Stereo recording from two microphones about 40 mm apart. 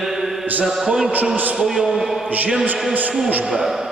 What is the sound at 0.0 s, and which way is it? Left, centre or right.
Mantra, centre.